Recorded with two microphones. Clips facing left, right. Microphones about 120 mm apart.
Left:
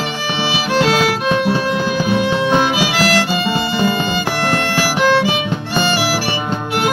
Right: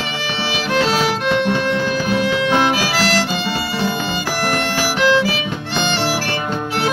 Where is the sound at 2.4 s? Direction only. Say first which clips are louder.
Left 1 dB; 5° left (ahead or behind).